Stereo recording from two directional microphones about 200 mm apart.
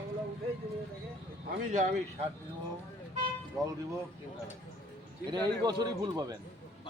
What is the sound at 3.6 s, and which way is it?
Speech, 20° right (ahead or behind).